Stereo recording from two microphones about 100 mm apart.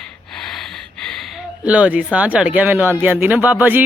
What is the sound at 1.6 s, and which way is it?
Speech, 15° right (ahead or behind).